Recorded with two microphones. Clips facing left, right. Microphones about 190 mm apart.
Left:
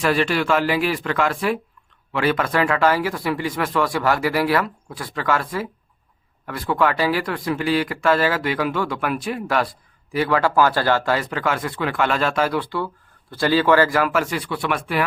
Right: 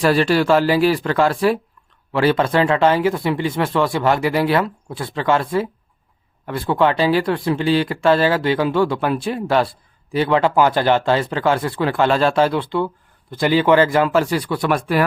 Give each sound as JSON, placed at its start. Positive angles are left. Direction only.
{"t": 0.0, "sound": "speech", "side_deg": -35}